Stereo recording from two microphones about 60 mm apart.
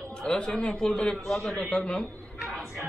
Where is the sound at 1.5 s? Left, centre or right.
Centre.